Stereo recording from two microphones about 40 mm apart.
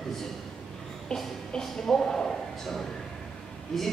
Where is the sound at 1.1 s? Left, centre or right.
Centre.